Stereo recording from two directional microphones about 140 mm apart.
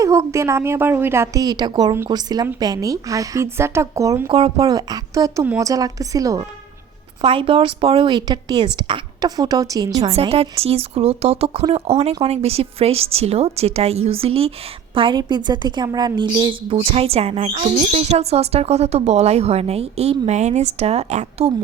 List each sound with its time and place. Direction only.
0.0 s speech: 20° right (ahead or behind)
4.3 s a woman's voice: 40° right (ahead or behind)
4.6 s speech: 25° right (ahead or behind)
7.2 s a woman's voice: 40° right (ahead or behind)
10.1 s a woman's voice: 45° right (ahead or behind)